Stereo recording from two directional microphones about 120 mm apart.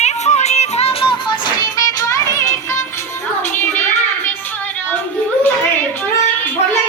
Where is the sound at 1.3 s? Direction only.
30° left (ahead or behind).